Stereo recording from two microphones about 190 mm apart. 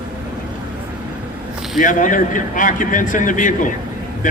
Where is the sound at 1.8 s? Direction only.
45° left (ahead or behind).